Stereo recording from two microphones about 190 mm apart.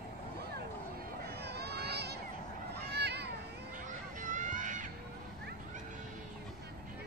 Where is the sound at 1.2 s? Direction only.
60° right (ahead or behind).